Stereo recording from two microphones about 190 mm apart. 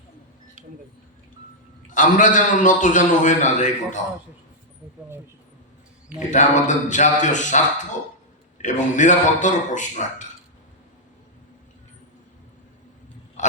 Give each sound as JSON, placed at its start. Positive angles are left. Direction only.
{"t": 1.9, "sound": "a man's voice", "side_deg": 45}
{"t": 6.1, "sound": "a man's voice", "side_deg": 40}
{"t": 8.6, "sound": "a man's voice", "side_deg": 40}
{"t": 13.4, "sound": "a sound", "side_deg": 40}